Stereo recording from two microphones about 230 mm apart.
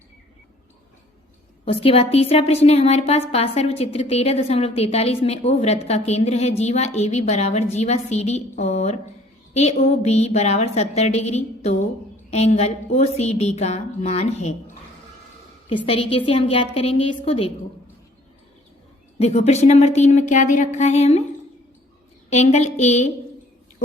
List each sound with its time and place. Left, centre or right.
1.6 s a woman's voice: left
15.9 s a woman's voice: left
19.2 s a woman's voice: left
22.3 s a woman's voice: left